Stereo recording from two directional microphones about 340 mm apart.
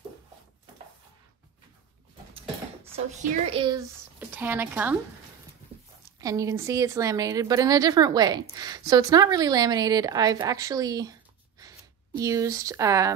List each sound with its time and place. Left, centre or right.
2.3 s a sound: centre
3.1 s a woman's voice: centre
6.1 s a woman's voice: centre
12.2 s a woman's voice: centre